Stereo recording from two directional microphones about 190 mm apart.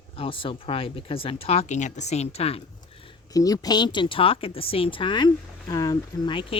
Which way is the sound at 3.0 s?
20° left (ahead or behind).